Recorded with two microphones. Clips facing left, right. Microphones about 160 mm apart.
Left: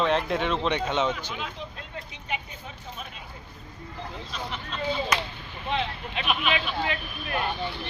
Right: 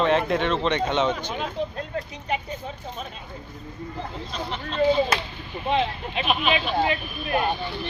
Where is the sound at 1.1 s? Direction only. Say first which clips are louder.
Right 7 dB; 40° right (ahead or behind).